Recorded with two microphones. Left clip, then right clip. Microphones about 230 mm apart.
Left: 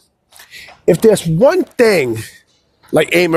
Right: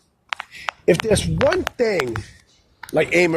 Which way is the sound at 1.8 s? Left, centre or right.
Left.